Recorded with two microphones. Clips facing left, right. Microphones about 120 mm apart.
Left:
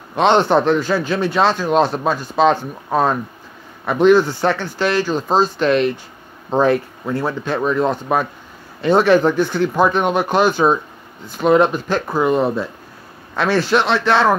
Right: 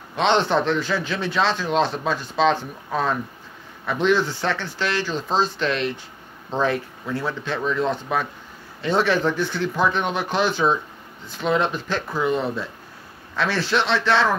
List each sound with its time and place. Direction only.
0.1 s speech: 50° left (ahead or behind)